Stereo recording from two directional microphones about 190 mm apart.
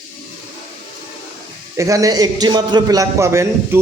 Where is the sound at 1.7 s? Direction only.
15° right (ahead or behind).